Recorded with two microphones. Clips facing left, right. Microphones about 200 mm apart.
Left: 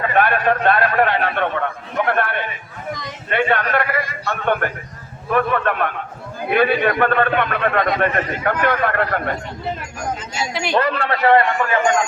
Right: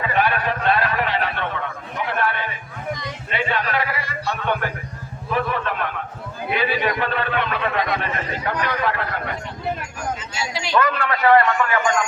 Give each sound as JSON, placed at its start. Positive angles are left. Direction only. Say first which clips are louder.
{"t": 0.2, "sound": "a sound", "louder": "left 5 dB", "side_deg": 55}
{"t": 6.5, "sound": "a man's voice", "louder": "left 6 dB", "side_deg": 55}
{"t": 10.5, "sound": "speech", "louder": "left 5 dB", "side_deg": 55}
{"t": 10.8, "sound": "a man's voice", "louder": "left 1 dB", "side_deg": 30}